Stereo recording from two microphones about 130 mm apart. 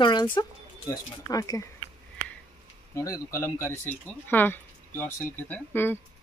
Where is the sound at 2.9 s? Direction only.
25° left (ahead or behind).